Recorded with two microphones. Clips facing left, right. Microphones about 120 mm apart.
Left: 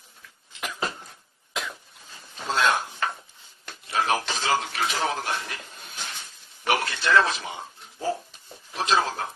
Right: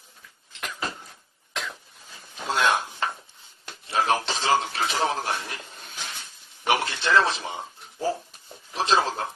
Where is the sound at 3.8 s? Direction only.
30° right (ahead or behind).